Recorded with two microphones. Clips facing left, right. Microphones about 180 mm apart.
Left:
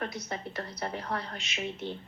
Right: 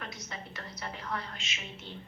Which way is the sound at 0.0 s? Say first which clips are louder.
Left 7 dB; 35° left (ahead or behind).